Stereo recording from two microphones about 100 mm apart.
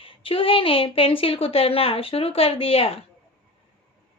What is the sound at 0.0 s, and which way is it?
A woman's voice, 65° left (ahead or behind).